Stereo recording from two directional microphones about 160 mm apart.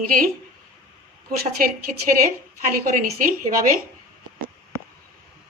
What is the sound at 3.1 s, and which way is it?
Speech, 55° right (ahead or behind).